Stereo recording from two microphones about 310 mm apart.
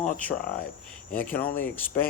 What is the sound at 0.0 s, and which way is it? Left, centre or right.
Speech, centre.